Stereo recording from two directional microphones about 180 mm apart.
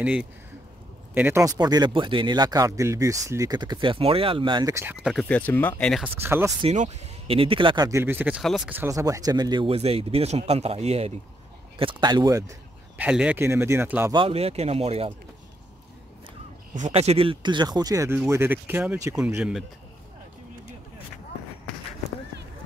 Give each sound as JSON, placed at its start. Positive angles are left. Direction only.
{"t": 0.0, "sound": "speech", "side_deg": -5}
{"t": 5.0, "sound": "speech", "side_deg": 5}
{"t": 6.2, "sound": "speech", "side_deg": -15}
{"t": 6.6, "sound": "speech", "side_deg": -40}
{"t": 11.8, "sound": "speech", "side_deg": -25}
{"t": 12.9, "sound": "speech", "side_deg": -5}
{"t": 14.1, "sound": "speech", "side_deg": -30}
{"t": 16.7, "sound": "speech", "side_deg": -40}